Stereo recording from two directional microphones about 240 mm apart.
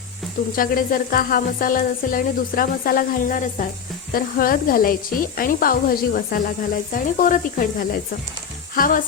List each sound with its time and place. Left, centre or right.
0.5 s speech: left
8.7 s frying: left